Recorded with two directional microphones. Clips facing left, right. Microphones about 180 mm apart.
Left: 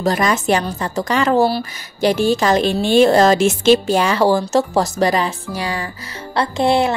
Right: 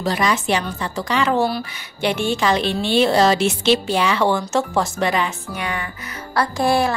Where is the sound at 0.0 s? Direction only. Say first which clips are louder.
Left 3 dB; 45° left (ahead or behind).